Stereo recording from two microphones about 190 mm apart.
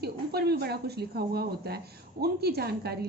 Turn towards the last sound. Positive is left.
turn(degrees=-55)  # may be behind; listen again after turning